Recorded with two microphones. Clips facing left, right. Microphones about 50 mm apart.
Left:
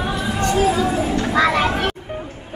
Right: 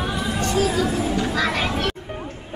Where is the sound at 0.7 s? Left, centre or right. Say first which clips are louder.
Left 2 dB; left.